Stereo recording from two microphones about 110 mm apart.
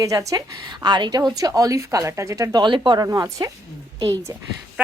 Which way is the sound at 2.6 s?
45° right (ahead or behind).